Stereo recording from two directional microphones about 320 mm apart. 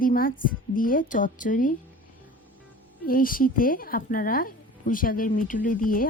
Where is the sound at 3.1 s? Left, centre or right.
Left.